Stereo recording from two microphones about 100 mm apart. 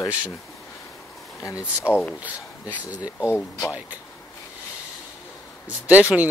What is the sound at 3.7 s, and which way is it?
Speech, 15° right (ahead or behind).